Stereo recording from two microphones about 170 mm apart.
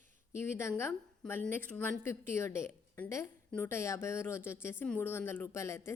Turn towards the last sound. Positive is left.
turn(degrees=15)  # may be behind; listen again after turning